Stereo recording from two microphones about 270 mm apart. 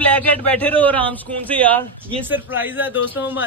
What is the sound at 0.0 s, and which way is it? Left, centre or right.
A man's voice, centre.